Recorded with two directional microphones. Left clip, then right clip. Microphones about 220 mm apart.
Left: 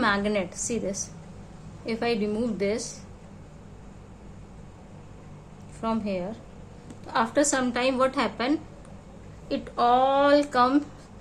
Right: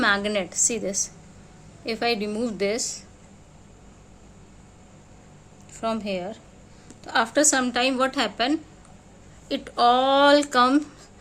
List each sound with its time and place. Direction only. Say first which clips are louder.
0.0 s a woman's voice: right 3 dB; 30° right (ahead or behind)
5.8 s a woman's voice: right 2 dB; 30° right (ahead or behind)